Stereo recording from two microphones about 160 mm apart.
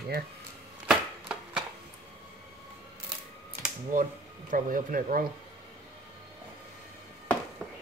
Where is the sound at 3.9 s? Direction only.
55° right (ahead or behind).